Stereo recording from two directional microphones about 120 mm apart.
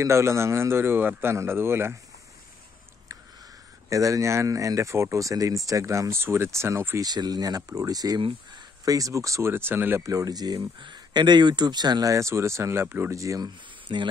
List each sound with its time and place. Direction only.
0.0 s speech: 25° right (ahead or behind)
3.1 s a sound: 30° right (ahead or behind)
3.9 s speech: 25° right (ahead or behind)
7.1 s speech: 35° right (ahead or behind)
8.2 s speech: 50° right (ahead or behind)
8.8 s speech: 30° right (ahead or behind)
10.0 s speech: 30° right (ahead or behind)
13.9 s speech: 45° right (ahead or behind)